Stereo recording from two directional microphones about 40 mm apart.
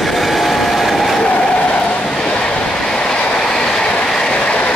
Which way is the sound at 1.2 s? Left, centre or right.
Left.